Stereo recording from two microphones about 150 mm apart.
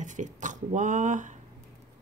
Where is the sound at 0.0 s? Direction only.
55° right (ahead or behind).